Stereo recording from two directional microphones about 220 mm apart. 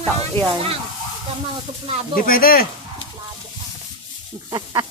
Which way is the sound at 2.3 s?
40° left (ahead or behind).